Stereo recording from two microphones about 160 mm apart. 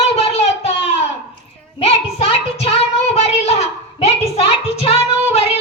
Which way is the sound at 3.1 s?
40° left (ahead or behind).